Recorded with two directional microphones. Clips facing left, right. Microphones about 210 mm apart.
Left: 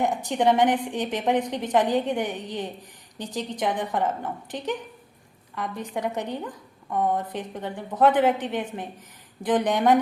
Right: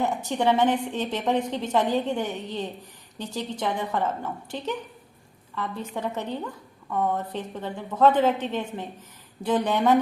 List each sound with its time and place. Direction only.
0.0 s a woman's voice: 15° left (ahead or behind)
6.1 s a woman's voice: 15° left (ahead or behind)